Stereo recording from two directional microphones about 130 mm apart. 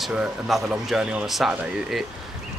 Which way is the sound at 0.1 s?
Centre (ahead or behind).